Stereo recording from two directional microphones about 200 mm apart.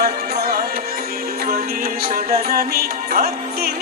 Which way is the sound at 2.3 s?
50° right (ahead or behind).